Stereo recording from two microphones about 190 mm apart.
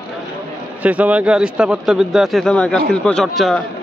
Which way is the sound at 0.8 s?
5° right (ahead or behind).